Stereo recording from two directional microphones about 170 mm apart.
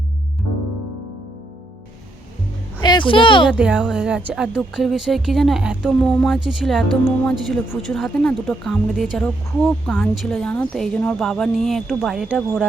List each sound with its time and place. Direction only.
2.8 s speech: 25° left (ahead or behind)
3.6 s speech: 5° right (ahead or behind)